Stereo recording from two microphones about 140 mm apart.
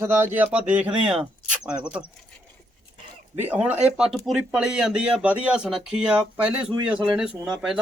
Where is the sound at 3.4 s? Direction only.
10° right (ahead or behind).